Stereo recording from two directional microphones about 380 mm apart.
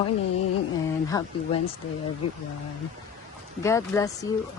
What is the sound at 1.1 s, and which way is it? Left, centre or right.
Speech, centre.